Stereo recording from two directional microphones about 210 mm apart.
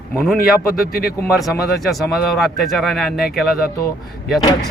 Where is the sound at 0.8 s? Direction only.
45° left (ahead or behind).